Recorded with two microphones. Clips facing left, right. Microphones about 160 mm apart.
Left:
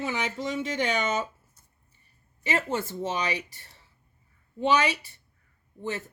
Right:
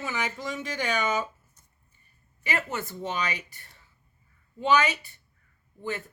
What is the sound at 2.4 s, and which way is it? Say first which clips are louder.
Speech: left 3 dB; 25° left (ahead or behind).